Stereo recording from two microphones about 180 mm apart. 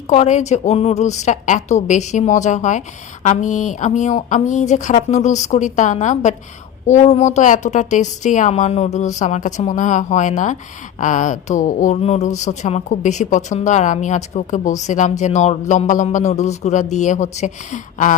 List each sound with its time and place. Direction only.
0.1 s speech: 40° left (ahead or behind)